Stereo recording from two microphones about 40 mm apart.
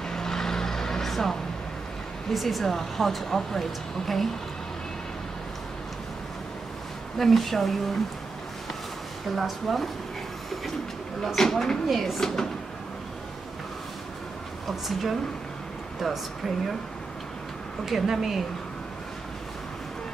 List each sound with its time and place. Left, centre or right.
0.1 s vehicle: centre
2.3 s speech: centre
7.2 s speech: centre
9.3 s speech: centre
11.3 s speech: centre
14.7 s speech: centre
17.8 s a woman's voice: centre